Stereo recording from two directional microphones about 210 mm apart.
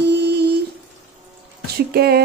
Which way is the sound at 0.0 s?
55° right (ahead or behind).